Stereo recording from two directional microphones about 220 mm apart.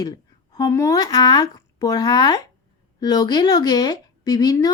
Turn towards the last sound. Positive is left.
turn(degrees=15)  # may be behind; listen again after turning